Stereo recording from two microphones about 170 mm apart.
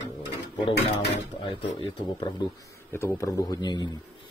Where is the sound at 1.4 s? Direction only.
30° left (ahead or behind).